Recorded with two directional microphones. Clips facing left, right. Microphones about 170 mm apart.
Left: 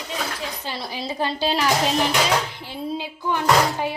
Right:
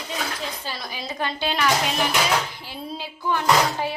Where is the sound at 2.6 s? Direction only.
20° left (ahead or behind).